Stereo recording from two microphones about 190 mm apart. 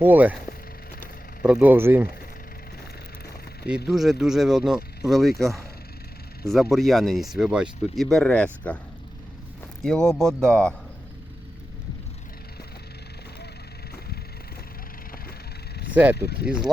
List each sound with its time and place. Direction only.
0.0 s speech: 10° right (ahead or behind)
1.4 s speech: 5° right (ahead or behind)
3.8 s speech: centre (ahead or behind)
9.8 s speech: 5° left (ahead or behind)
15.9 s speech: 10° right (ahead or behind)
16.1 s speech: 60° left (ahead or behind)